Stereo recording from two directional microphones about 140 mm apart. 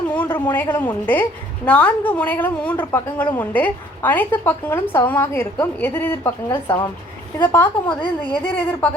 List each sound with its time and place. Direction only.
0.2 s a woman's voice: 10° left (ahead or behind)
8.0 s a woman's voice: 35° left (ahead or behind)